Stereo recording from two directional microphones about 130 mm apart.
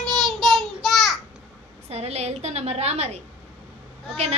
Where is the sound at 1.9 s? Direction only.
55° right (ahead or behind).